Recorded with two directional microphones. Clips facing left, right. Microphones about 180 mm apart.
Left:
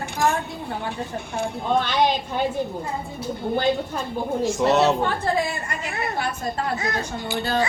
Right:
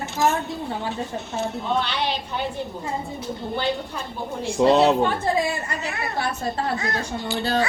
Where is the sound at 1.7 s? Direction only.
45° left (ahead or behind).